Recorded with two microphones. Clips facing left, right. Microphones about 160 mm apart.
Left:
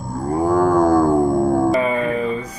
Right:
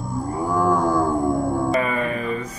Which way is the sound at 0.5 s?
45° left (ahead or behind).